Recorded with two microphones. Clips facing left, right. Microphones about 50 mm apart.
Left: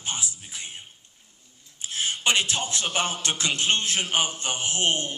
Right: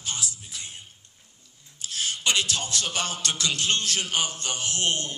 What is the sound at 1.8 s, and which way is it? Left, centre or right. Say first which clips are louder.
A man's voice: left 2 dB; left.